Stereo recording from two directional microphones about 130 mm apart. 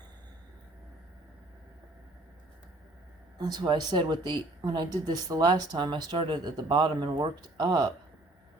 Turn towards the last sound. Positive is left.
turn(degrees=-35)  # may be behind; listen again after turning